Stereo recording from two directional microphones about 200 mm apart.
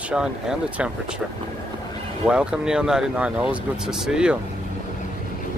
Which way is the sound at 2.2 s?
5° right (ahead or behind).